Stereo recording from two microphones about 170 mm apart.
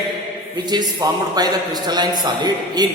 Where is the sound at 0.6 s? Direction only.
25° right (ahead or behind).